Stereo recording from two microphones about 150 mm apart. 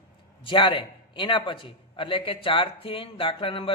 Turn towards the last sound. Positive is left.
turn(degrees=35)  # may be behind; listen again after turning